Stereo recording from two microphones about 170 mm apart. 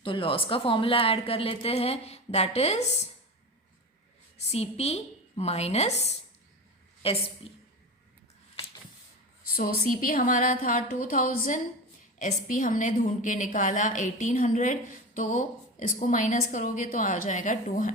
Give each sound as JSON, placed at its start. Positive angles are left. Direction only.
{"t": 0.0, "sound": "a woman's voice", "side_deg": 30}
{"t": 4.4, "sound": "a woman's voice", "side_deg": 40}
{"t": 9.6, "sound": "a woman's voice", "side_deg": 55}